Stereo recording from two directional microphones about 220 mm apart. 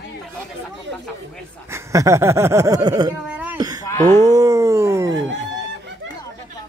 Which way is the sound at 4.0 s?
30° right (ahead or behind).